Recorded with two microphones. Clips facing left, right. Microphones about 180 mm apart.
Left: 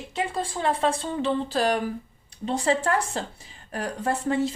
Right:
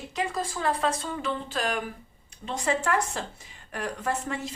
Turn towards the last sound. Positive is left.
turn(degrees=30)  # may be behind; listen again after turning